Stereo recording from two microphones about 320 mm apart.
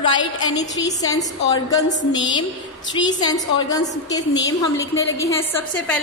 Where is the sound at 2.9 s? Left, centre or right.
Centre.